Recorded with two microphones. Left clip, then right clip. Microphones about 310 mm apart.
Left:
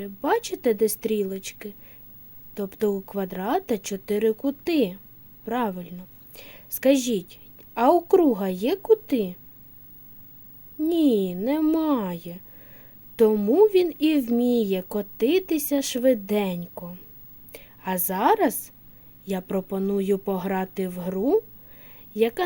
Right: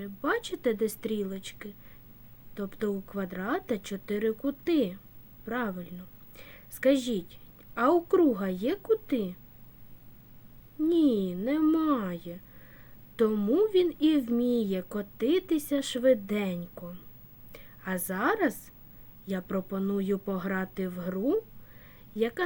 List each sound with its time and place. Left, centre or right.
0.0 s a woman's voice: centre
10.8 s a woman's voice: centre
21.8 s a sound: centre